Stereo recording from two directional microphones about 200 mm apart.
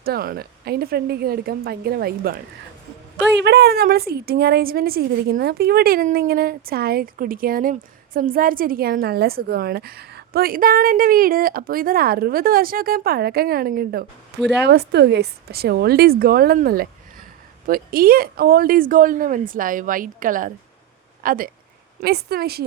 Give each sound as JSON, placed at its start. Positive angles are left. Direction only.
{"t": 0.0, "sound": "a woman's voice", "side_deg": -50}
{"t": 3.4, "sound": "a woman's voice", "side_deg": -55}